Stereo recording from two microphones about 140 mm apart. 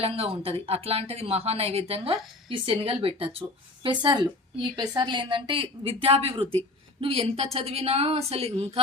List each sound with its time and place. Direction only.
0.0 s a woman's voice: 45° right (ahead or behind)